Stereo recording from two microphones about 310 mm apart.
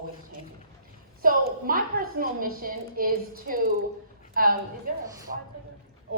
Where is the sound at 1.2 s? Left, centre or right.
Right.